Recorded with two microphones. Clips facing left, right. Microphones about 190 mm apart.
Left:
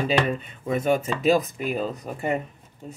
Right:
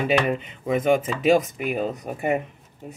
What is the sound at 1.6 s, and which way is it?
Speech, 60° right (ahead or behind).